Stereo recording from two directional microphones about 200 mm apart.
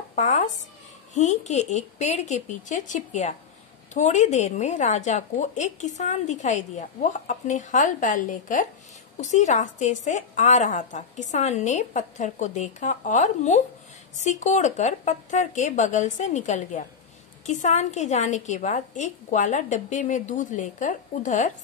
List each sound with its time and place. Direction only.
0.1 s speech: 35° left (ahead or behind)